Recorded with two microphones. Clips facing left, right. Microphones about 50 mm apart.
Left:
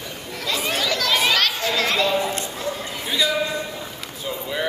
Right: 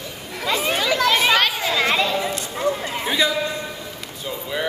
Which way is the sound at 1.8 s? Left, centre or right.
Centre.